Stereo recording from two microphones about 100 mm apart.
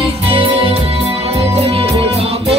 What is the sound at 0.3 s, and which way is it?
Music, 70° right (ahead or behind).